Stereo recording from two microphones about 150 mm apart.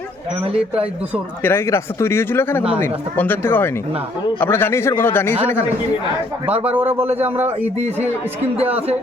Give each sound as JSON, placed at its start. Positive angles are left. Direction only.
{"t": 1.4, "sound": "speech", "side_deg": 15}
{"t": 6.6, "sound": "speech", "side_deg": -10}
{"t": 8.5, "sound": "speech", "side_deg": -45}